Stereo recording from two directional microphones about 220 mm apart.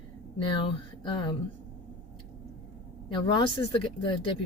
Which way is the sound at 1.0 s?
20° left (ahead or behind).